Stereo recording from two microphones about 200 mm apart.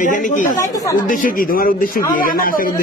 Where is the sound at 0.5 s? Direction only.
15° left (ahead or behind).